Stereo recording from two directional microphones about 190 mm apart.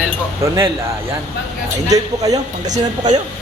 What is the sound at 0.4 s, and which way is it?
Speech, 15° right (ahead or behind).